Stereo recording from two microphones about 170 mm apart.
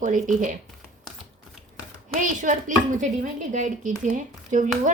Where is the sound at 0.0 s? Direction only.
50° right (ahead or behind).